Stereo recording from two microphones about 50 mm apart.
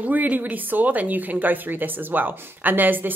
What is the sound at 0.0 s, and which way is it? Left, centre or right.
Speech, right.